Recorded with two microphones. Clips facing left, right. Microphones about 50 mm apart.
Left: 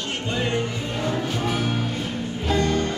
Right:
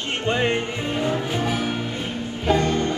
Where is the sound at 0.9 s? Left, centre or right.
Right.